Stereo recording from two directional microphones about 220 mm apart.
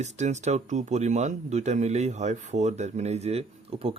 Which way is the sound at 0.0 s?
30° right (ahead or behind).